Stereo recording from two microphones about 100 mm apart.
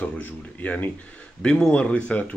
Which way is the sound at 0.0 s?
15° left (ahead or behind).